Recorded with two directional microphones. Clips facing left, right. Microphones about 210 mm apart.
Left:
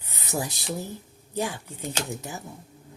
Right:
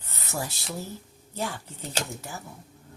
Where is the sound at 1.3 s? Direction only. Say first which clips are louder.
Left 3 dB; 15° left (ahead or behind).